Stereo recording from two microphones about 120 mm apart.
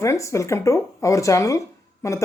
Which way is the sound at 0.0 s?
25° left (ahead or behind).